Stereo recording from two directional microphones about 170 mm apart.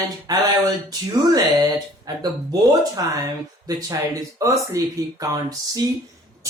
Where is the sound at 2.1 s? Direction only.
20° right (ahead or behind).